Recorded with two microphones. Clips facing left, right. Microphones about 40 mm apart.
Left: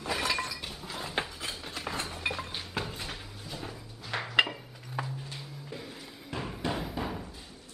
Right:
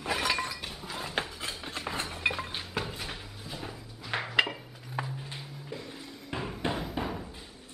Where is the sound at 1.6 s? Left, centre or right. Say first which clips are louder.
Right 1 dB; centre.